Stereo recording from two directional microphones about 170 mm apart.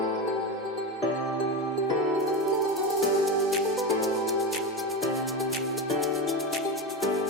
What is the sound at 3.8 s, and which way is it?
Music, centre (ahead or behind).